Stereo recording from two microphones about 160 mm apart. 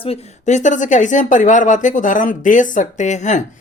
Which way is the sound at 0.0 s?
40° left (ahead or behind).